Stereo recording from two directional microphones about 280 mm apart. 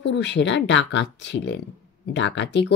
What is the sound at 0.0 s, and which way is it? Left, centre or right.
Speech, left.